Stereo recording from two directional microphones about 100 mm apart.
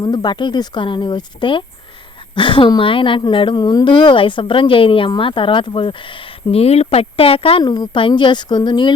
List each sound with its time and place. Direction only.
0.0 s a woman's voice: 45° left (ahead or behind); by 7.6 s 70° left (ahead or behind)
7.6 s speech: 45° left (ahead or behind)